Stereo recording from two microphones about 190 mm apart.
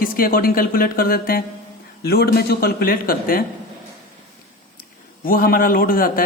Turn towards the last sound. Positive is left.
turn(degrees=50)  # may be behind; listen again after turning